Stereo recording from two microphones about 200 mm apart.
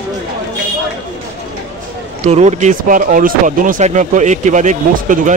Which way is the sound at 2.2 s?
35° right (ahead or behind).